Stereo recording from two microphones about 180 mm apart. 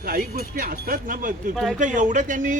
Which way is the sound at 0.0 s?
50° right (ahead or behind).